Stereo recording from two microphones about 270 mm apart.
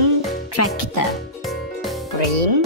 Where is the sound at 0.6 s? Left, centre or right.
Left.